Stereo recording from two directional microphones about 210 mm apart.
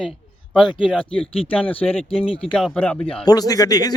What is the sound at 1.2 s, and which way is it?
Speech, 25° left (ahead or behind).